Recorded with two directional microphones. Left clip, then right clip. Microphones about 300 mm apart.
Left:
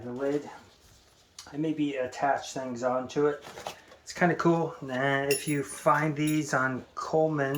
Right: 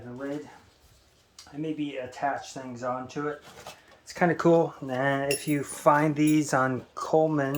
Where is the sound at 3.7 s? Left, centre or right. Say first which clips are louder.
Left 6 dB; centre.